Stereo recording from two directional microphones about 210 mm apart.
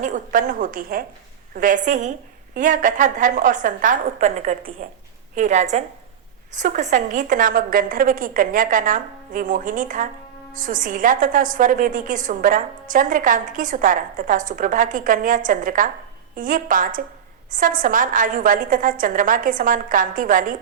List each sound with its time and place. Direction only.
0.0 s a woman's voice: 40° right (ahead or behind)